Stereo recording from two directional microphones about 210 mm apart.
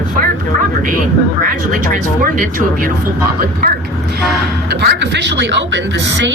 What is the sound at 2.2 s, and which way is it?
Speech, 40° right (ahead or behind).